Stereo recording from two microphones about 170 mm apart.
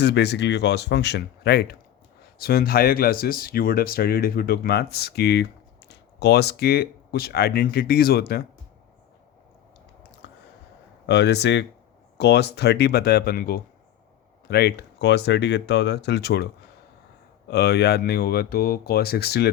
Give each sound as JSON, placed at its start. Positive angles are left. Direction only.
{"t": 0.0, "sound": "speech", "side_deg": 80}
{"t": 2.4, "sound": "speech", "side_deg": 65}
{"t": 10.2, "sound": "a sound", "side_deg": 90}
{"t": 11.0, "sound": "speech", "side_deg": 85}
{"t": 17.5, "sound": "speech", "side_deg": 75}